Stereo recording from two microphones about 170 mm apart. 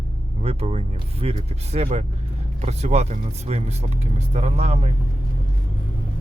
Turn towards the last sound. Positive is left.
turn(degrees=-40)  # may be behind; listen again after turning